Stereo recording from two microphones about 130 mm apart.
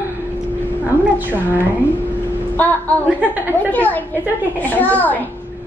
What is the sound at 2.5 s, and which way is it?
Speech, 10° left (ahead or behind).